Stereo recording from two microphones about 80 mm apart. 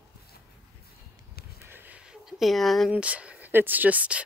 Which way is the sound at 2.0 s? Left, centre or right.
Centre.